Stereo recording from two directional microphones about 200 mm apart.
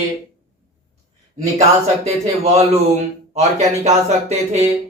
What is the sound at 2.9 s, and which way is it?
Speech, 35° right (ahead or behind).